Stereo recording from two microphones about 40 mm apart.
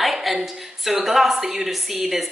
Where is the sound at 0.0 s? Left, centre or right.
Centre.